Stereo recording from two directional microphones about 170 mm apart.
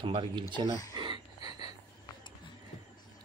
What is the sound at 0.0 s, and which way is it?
Speech, 30° right (ahead or behind).